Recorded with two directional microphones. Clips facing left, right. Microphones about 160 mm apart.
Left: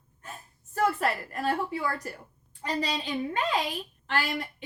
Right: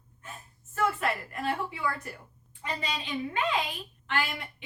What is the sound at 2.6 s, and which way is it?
A woman's voice, 35° left (ahead or behind).